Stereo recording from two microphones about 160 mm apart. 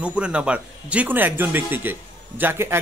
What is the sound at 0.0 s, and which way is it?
Speech, 5° right (ahead or behind).